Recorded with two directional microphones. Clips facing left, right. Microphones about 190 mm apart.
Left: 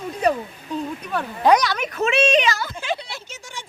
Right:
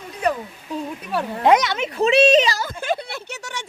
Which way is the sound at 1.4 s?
25° right (ahead or behind).